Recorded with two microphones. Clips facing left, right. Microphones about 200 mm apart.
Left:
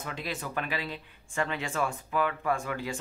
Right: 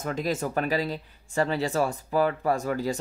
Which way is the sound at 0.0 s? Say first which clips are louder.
Right 8 dB; 45° right (ahead or behind).